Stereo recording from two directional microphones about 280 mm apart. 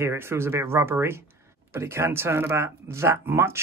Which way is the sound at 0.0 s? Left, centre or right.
Centre.